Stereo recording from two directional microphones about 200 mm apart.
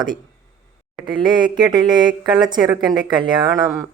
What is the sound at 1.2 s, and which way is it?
A woman's voice, 20° right (ahead or behind).